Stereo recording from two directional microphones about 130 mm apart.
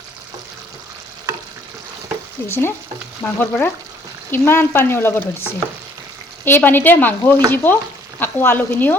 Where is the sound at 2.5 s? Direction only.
15° left (ahead or behind).